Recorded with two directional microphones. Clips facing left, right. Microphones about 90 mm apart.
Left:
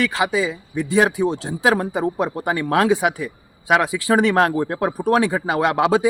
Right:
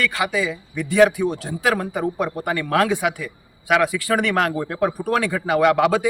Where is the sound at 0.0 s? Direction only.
25° left (ahead or behind).